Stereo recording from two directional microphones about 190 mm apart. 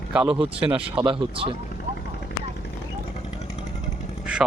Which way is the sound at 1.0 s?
25° right (ahead or behind).